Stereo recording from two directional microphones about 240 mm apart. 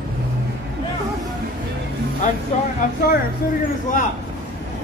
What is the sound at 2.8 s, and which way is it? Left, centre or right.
Speech, left.